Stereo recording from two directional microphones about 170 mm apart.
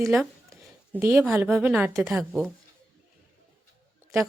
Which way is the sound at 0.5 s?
15° right (ahead or behind).